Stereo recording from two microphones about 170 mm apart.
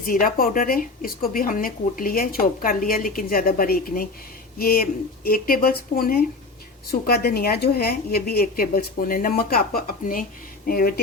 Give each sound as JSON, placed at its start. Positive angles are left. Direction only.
{"t": 0.0, "sound": "a woman's voice", "side_deg": 55}